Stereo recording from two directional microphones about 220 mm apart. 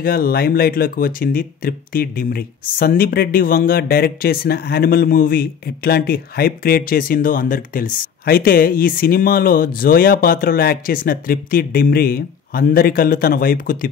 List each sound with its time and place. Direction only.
0.0 s speech: 45° left (ahead or behind)